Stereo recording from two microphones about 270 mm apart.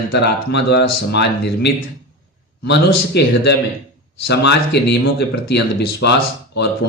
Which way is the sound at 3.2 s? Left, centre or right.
Left.